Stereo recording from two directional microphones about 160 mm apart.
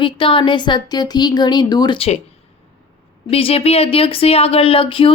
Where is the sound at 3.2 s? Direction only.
35° left (ahead or behind).